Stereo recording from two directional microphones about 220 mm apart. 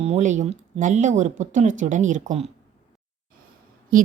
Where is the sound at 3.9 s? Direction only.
40° right (ahead or behind).